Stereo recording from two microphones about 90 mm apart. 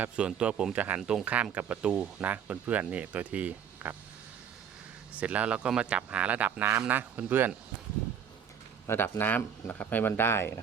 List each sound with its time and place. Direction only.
0.0 s speech: 15° right (ahead or behind)
5.1 s speech: 15° right (ahead or behind)
8.9 s speech: 25° left (ahead or behind)